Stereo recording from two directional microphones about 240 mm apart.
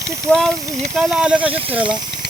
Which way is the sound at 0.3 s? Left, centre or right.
Centre.